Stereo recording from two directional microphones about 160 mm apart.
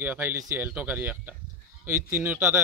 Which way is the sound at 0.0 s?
10° right (ahead or behind).